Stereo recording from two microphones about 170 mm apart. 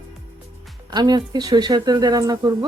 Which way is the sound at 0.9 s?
25° right (ahead or behind).